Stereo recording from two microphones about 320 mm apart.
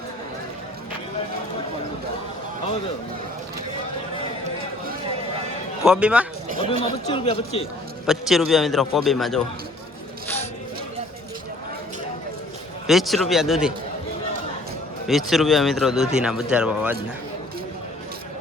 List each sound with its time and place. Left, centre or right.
5.8 s speech: centre
6.7 s speech: centre
8.0 s speech: centre
12.9 s speech: centre
15.0 s speech: centre